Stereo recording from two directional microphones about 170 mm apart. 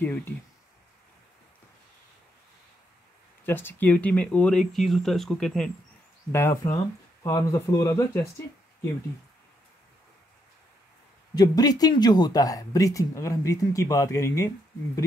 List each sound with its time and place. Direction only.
0.0 s speech: 10° left (ahead or behind)
3.4 s speech: 10° left (ahead or behind)
6.3 s speech: 15° left (ahead or behind)
11.3 s speech: 20° left (ahead or behind)